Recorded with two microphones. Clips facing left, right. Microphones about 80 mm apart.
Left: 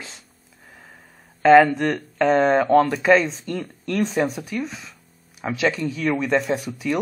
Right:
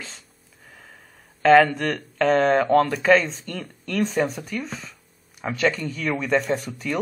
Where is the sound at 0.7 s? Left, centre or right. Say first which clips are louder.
Left 1 dB; centre.